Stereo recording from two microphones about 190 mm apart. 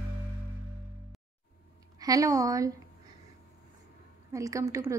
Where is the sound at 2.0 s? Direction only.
20° right (ahead or behind).